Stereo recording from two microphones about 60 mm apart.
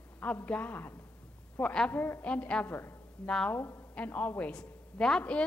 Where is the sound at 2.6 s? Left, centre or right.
Left.